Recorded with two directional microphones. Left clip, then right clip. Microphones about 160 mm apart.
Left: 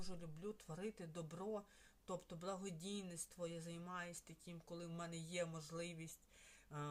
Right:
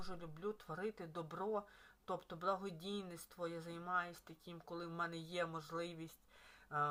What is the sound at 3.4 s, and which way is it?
Speech, 15° left (ahead or behind).